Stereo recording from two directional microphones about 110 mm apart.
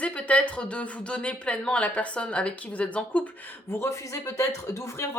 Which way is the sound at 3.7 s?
25° left (ahead or behind).